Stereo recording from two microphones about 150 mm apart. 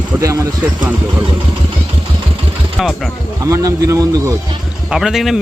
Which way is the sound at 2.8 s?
Centre (ahead or behind).